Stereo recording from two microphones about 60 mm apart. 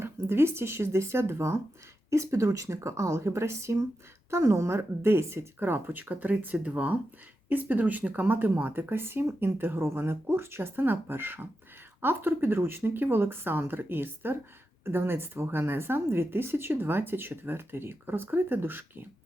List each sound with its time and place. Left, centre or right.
0.0 s speech: right
5.5 s speech: right